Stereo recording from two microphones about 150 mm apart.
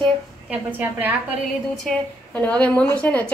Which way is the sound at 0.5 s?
10° right (ahead or behind).